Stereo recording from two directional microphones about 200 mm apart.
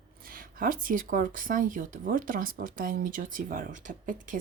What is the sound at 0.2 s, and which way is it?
Speech, 45° right (ahead or behind).